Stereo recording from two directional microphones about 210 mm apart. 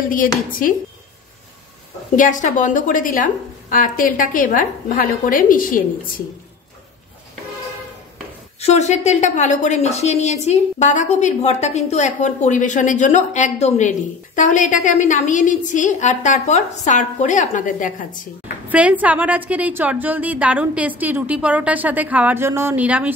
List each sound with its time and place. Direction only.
0.6 s a woman's voice: 40° left (ahead or behind)
2.1 s a woman's voice: 35° left (ahead or behind)
8.5 s a woman's voice: 30° left (ahead or behind)
18.7 s a woman's voice: 5° right (ahead or behind)